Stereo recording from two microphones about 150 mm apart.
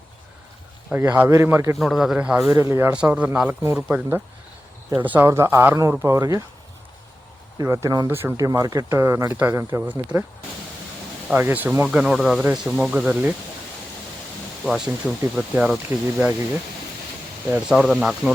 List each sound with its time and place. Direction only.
0.9 s speech: 10° right (ahead or behind)
1.8 s speech: centre (ahead or behind)
2.5 s speech: 20° right (ahead or behind)
7.6 s speech: 20° right (ahead or behind)
11.3 s speech: 10° right (ahead or behind)
14.6 s speech: 5° right (ahead or behind)
17.5 s speech: 5° right (ahead or behind)